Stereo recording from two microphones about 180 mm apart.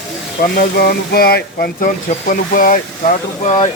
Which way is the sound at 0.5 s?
60° left (ahead or behind).